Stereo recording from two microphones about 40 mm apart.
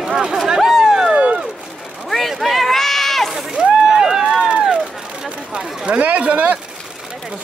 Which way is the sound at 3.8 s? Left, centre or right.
Centre.